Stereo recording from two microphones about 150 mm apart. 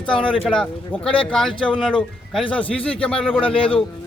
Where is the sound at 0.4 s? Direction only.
5° left (ahead or behind).